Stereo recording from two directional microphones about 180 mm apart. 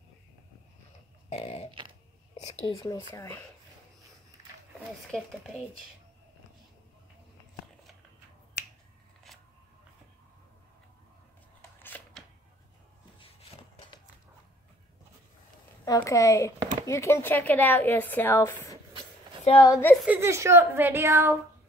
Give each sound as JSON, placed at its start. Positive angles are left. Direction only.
{"t": 1.3, "sound": "a sound", "side_deg": 35}
{"t": 2.6, "sound": "speech", "side_deg": 25}
{"t": 5.1, "sound": "speech", "side_deg": 5}
{"t": 8.6, "sound": "finger snapping", "side_deg": 70}
{"t": 11.9, "sound": "a sound", "side_deg": 10}
{"t": 15.8, "sound": "a woman's voice", "side_deg": 15}
{"t": 19.4, "sound": "speech", "side_deg": 25}
{"t": 20.1, "sound": "a woman's voice", "side_deg": -15}